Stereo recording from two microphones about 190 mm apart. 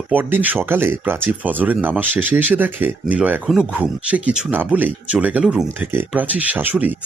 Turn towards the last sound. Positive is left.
turn(degrees=-10)  # may be behind; listen again after turning